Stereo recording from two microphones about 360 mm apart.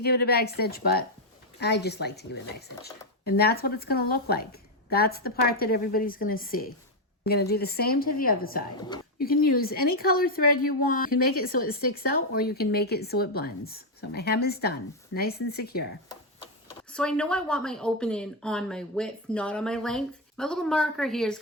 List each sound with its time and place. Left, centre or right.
0.0 s a woman's voice: left
16.9 s a woman's voice: centre